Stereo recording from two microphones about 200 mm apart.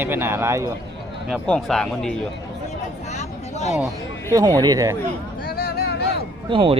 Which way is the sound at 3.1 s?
35° left (ahead or behind).